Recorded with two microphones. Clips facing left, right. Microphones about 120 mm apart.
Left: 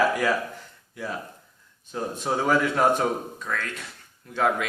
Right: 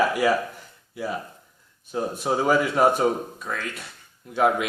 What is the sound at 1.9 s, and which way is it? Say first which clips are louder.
Speech: right 3 dB; 10° right (ahead or behind).